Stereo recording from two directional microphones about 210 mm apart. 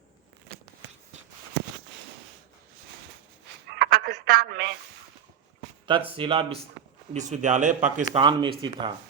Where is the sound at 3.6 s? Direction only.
50° right (ahead or behind).